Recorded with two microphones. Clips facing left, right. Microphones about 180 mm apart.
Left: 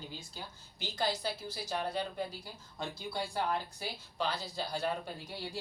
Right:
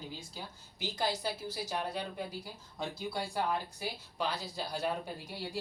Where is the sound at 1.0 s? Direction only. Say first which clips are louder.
Even; 10° right (ahead or behind).